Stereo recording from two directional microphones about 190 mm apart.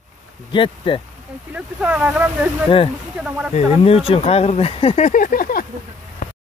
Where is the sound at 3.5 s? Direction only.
30° left (ahead or behind); by 5.6 s 50° left (ahead or behind).